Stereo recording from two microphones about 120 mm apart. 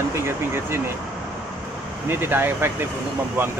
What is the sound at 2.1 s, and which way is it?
Speech, 20° right (ahead or behind).